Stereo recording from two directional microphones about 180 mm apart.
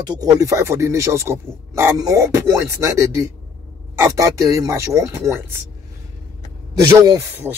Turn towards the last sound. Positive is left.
turn(degrees=-20)  # may be behind; listen again after turning